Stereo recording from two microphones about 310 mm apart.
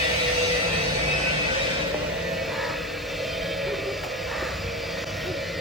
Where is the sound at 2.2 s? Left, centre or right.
Centre.